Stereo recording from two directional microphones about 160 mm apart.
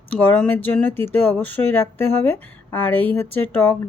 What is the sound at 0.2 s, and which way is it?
Speech, 10° left (ahead or behind).